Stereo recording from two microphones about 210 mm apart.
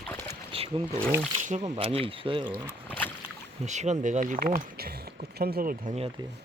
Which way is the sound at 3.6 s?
35° right (ahead or behind).